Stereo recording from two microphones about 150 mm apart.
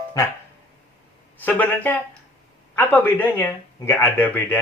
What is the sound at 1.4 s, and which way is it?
Speech, 10° left (ahead or behind).